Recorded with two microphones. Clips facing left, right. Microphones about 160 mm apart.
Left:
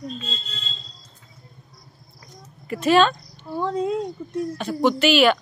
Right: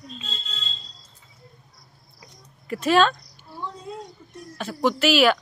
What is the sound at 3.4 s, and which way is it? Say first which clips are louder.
Speech: left 13 dB; 80° left.